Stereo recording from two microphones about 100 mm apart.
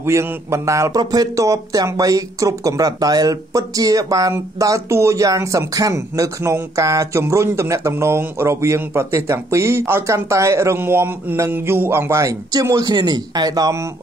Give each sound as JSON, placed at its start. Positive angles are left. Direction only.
{"t": 0.0, "sound": "a man's voice", "side_deg": -25}